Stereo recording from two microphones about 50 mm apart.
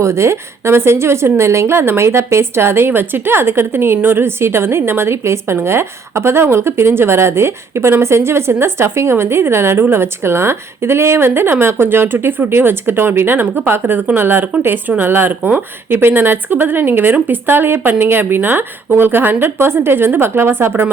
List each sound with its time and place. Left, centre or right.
0.0 s a woman's voice: right